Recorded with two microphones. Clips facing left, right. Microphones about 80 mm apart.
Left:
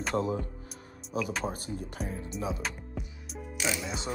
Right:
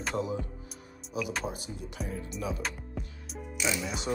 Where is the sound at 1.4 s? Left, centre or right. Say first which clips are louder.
Left 2 dB; left.